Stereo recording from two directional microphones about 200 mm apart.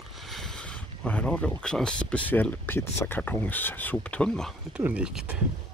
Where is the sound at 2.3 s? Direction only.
10° left (ahead or behind).